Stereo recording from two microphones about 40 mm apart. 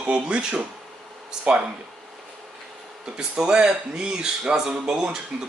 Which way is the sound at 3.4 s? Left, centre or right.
Centre.